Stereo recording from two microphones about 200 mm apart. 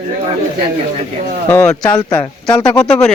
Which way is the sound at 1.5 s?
10° left (ahead or behind).